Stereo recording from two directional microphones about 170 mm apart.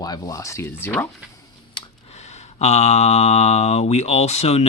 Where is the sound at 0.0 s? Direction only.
20° left (ahead or behind).